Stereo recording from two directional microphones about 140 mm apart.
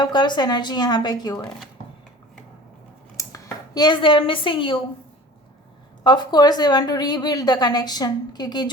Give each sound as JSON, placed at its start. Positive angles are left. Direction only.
{"t": 0.0, "sound": "a woman's voice", "side_deg": 30}
{"t": 1.4, "sound": "speech", "side_deg": 0}
{"t": 3.2, "sound": "speech", "side_deg": 20}
{"t": 6.0, "sound": "a woman's voice", "side_deg": 30}